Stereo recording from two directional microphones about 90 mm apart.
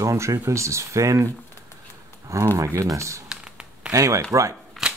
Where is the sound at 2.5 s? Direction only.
35° right (ahead or behind).